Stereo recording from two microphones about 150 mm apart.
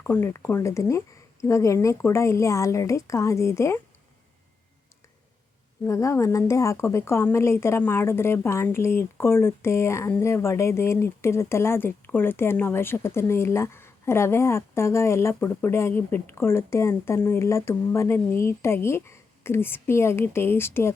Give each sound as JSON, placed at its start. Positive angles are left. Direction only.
{"t": 0.0, "sound": "speech", "side_deg": 15}
{"t": 5.8, "sound": "speech", "side_deg": 20}